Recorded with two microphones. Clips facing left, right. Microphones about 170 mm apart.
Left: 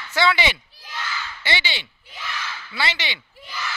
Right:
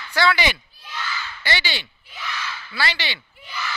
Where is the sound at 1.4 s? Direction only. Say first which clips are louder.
Right 1 dB; 20° left (ahead or behind).